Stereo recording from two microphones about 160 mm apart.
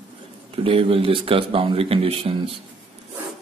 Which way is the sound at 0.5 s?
35° right (ahead or behind).